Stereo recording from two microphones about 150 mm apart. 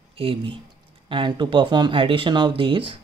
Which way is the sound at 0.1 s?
35° right (ahead or behind).